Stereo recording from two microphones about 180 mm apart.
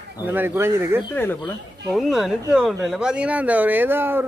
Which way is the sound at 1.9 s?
Centre (ahead or behind).